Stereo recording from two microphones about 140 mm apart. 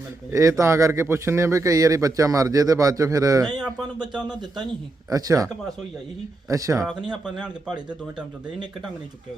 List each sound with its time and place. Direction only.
0.3 s a man's voice: 25° right (ahead or behind)
4.1 s a man's voice: 5° right (ahead or behind)
5.0 s a man's voice: 25° right (ahead or behind)
6.5 s a man's voice: 25° right (ahead or behind)
7.1 s a man's voice: 5° right (ahead or behind)